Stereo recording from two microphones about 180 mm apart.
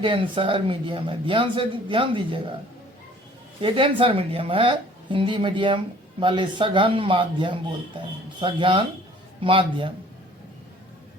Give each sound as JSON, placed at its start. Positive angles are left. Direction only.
{"t": 0.0, "sound": "a woman's voice", "side_deg": -30}
{"t": 3.6, "sound": "a woman's voice", "side_deg": -30}